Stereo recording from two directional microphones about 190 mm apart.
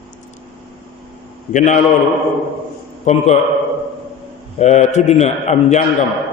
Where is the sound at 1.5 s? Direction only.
40° left (ahead or behind).